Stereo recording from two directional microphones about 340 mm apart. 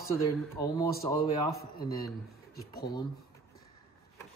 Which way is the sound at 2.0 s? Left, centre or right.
Centre.